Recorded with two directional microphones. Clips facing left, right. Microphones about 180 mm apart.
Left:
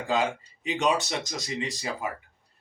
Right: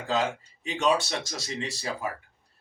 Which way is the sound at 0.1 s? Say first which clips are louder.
Left 1 dB; 15° left (ahead or behind).